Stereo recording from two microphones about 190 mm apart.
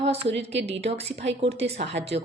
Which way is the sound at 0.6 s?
35° right (ahead or behind).